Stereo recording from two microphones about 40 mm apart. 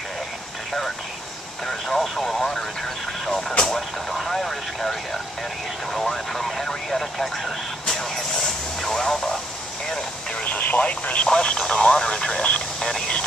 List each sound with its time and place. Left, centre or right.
1.7 s vehicle: centre
3.3 s speech: centre
3.6 s vehicle: centre
5.9 s vehicle: centre
8.8 s radio: centre
10.6 s speech: left
11.2 s speech: centre